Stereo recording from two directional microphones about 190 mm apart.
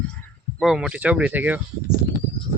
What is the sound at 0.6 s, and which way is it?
Speech, 5° right (ahead or behind).